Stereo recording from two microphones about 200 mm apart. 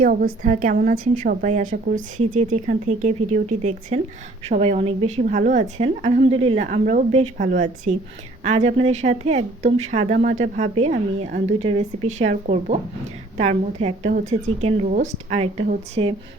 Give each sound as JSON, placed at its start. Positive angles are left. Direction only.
{"t": 0.0, "sound": "a woman's voice", "side_deg": -45}